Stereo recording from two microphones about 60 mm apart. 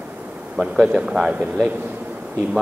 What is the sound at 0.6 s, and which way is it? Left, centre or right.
Speech, centre.